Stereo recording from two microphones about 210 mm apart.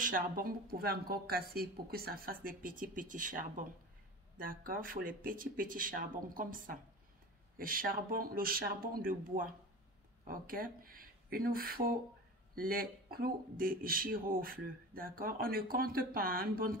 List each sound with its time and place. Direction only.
0.0 s speech: 40° right (ahead or behind)